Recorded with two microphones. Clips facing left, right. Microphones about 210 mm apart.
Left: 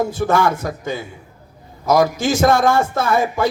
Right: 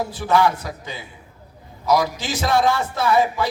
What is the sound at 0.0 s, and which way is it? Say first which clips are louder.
Speech: left 2 dB; 45° left (ahead or behind).